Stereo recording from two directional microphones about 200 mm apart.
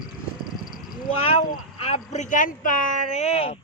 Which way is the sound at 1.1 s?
30° left (ahead or behind).